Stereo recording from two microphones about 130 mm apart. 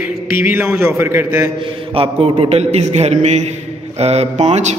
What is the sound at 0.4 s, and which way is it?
A man's voice, 15° right (ahead or behind).